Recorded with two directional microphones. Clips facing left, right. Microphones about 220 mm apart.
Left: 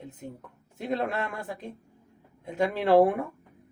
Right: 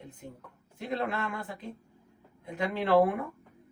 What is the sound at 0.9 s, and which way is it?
Speech, 45° left (ahead or behind).